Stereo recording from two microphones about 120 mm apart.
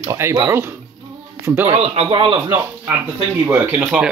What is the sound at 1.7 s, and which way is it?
Speech, 55° right (ahead or behind).